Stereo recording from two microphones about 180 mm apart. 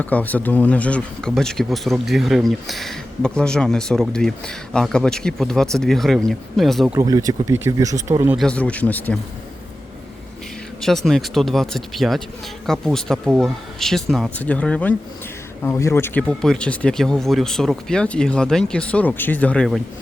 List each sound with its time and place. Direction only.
0.0 s speech: 10° left (ahead or behind)
6.9 s speech: 20° right (ahead or behind)
8.4 s speech: 5° left (ahead or behind)
10.8 s speech: centre (ahead or behind)